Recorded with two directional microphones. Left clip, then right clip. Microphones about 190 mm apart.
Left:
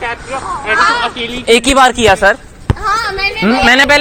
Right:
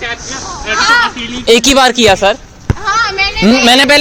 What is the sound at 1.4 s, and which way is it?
Speech, 50° right (ahead or behind).